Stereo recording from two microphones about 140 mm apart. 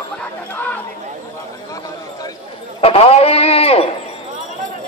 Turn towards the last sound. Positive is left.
turn(degrees=45)  # may be behind; listen again after turning